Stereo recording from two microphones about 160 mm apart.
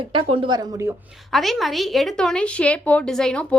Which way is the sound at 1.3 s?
Centre (ahead or behind).